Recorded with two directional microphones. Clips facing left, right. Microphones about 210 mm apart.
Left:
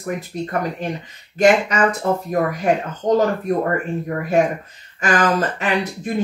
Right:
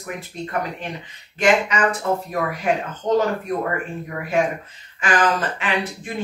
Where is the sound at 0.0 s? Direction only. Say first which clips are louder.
Left 5 dB; 40° left (ahead or behind).